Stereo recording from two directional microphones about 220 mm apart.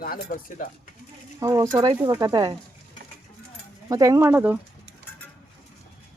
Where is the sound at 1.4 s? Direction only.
15° right (ahead or behind).